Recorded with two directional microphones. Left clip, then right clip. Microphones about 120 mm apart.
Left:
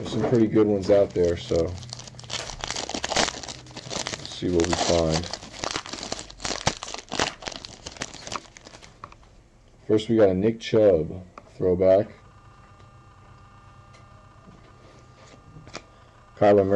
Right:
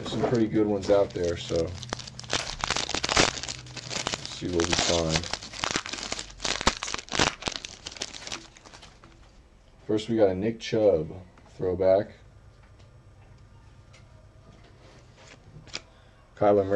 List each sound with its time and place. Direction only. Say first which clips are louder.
0.0 s speech: left 3 dB; 15° left (ahead or behind); by 2.1 s centre (ahead or behind)
2.2 s crumpling: right 3 dB; 5° right (ahead or behind)
9.8 s speech: left 4 dB; 15° left (ahead or behind)
16.3 s speech: left 4 dB; 5° left (ahead or behind)